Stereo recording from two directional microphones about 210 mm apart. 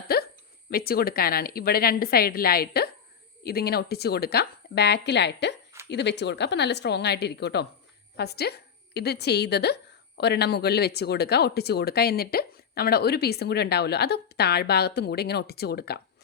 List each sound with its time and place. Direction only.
0.1 s hiccup: 50° left (ahead or behind)
0.7 s a woman's voice: 45° left (ahead or behind)